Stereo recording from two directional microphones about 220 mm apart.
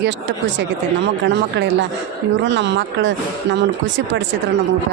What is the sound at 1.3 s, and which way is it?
A woman's voice, 55° right (ahead or behind).